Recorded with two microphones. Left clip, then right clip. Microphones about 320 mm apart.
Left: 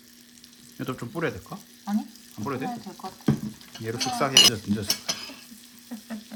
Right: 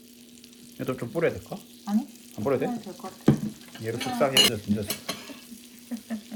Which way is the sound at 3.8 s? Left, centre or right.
Centre.